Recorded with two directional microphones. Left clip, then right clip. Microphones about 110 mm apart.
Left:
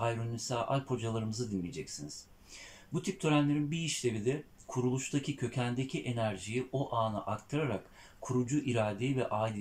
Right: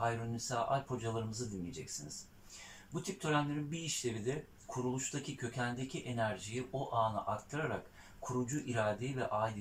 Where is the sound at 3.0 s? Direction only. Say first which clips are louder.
Left 4 dB; 20° left (ahead or behind).